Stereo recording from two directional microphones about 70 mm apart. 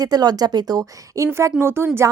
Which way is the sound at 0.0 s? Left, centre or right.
Right.